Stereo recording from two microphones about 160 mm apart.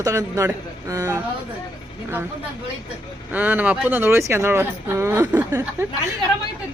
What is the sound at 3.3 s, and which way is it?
Speech, 10° right (ahead or behind).